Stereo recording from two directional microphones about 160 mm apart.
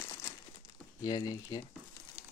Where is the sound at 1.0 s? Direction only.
20° left (ahead or behind).